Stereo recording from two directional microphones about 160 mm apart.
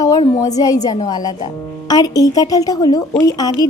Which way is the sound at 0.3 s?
20° left (ahead or behind).